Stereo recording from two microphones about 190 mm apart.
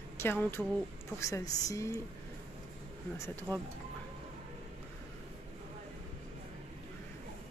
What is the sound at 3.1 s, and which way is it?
Speech, 15° left (ahead or behind).